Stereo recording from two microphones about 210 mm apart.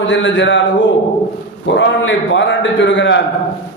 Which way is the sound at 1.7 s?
60° left (ahead or behind).